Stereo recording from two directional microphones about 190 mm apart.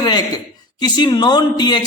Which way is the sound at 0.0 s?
20° left (ahead or behind).